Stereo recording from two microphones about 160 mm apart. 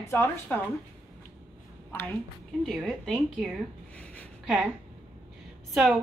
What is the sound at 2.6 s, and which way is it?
A woman's voice, centre (ahead or behind).